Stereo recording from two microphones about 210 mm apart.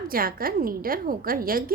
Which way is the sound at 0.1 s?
45° right (ahead or behind).